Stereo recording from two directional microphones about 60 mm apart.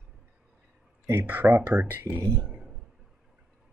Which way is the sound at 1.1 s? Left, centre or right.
Right.